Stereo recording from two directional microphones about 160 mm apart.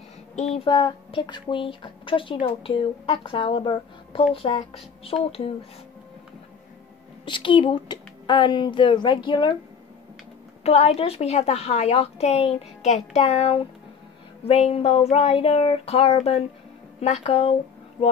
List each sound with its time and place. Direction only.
0.4 s a sound: 45° left (ahead or behind)
0.7 s a woman's voice: 30° left (ahead or behind)
7.2 s a woman's voice: 30° left (ahead or behind)
10.6 s a woman's voice: 40° left (ahead or behind)